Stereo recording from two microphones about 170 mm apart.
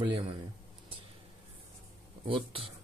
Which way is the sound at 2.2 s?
30° right (ahead or behind).